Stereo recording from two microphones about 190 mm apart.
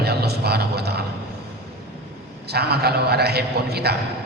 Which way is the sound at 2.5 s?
55° right (ahead or behind).